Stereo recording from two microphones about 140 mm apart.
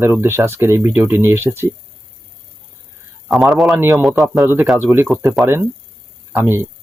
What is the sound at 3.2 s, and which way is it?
Speech, centre (ahead or behind).